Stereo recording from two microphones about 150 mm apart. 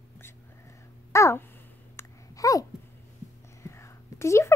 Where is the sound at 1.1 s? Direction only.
20° left (ahead or behind).